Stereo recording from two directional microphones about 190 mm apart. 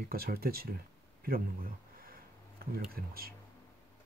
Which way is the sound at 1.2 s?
50° right (ahead or behind).